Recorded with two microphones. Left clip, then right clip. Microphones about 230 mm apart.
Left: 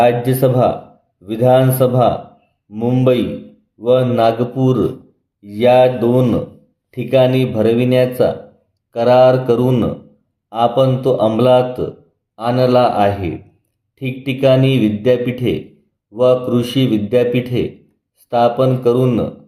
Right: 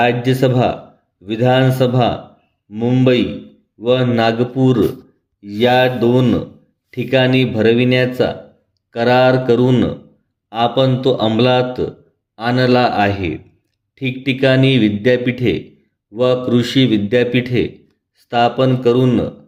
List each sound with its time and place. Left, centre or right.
0.0 s a man's voice: right